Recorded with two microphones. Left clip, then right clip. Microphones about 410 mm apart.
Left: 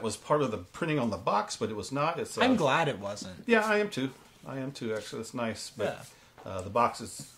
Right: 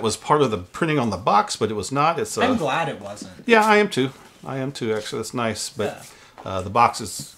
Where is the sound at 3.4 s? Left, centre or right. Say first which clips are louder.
Right 10 dB; right.